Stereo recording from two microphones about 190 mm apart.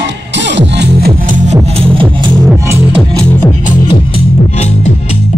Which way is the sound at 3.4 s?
25° left (ahead or behind).